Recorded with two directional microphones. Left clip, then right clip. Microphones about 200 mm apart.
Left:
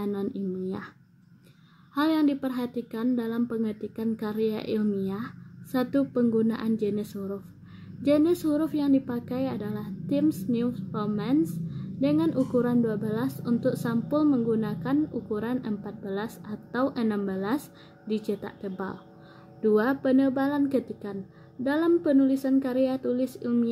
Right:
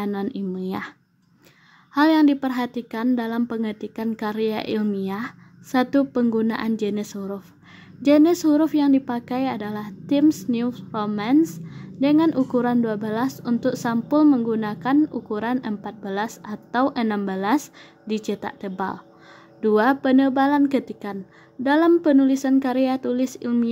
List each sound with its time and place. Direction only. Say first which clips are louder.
0.0 s a woman's voice: right 4 dB; 30° right (ahead or behind)
2.0 s a woman's voice: right 8 dB; 30° right (ahead or behind)